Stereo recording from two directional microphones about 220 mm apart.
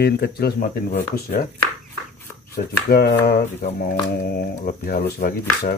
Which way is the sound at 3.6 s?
30° left (ahead or behind).